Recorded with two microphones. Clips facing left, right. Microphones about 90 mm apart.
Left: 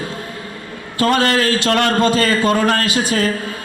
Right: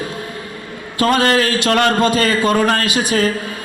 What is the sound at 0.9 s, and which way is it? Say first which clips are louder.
A man's voice: right 1 dB; 20° right (ahead or behind).